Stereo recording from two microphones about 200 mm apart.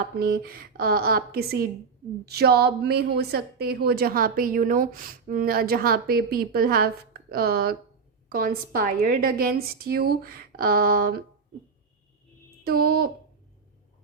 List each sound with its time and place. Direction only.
0.2 s a woman's voice: 50° right (ahead or behind)
12.6 s a woman's voice: 50° right (ahead or behind)